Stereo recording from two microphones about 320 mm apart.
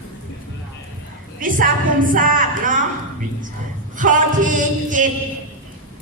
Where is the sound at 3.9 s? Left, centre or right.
Right.